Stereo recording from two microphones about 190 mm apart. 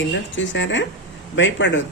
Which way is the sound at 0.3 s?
75° left (ahead or behind).